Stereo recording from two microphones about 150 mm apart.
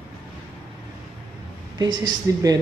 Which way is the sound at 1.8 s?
25° right (ahead or behind).